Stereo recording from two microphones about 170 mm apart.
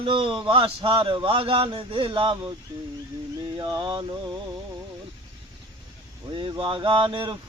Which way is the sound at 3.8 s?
25° right (ahead or behind).